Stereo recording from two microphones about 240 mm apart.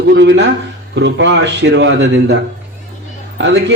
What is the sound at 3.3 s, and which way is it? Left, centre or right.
Speech, right.